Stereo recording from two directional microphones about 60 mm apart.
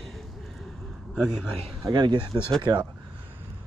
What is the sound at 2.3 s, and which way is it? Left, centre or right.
Speech, right.